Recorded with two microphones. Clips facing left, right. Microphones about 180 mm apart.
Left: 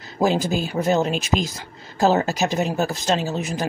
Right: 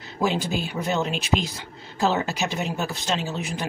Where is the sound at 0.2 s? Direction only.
40° left (ahead or behind).